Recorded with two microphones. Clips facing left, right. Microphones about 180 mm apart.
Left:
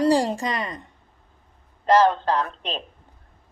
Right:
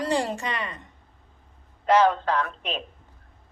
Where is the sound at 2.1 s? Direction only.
30° left (ahead or behind).